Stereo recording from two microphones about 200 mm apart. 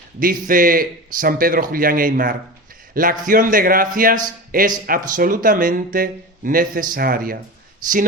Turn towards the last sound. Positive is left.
turn(degrees=-40)  # may be behind; listen again after turning